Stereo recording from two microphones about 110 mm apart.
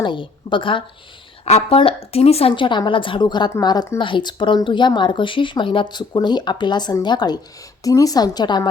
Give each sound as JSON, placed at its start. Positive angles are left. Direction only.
{"t": 0.0, "sound": "speech", "side_deg": 45}
{"t": 1.5, "sound": "a woman's voice", "side_deg": 70}